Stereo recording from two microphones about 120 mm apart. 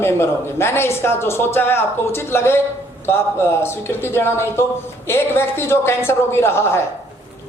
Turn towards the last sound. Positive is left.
turn(degrees=20)  # may be behind; listen again after turning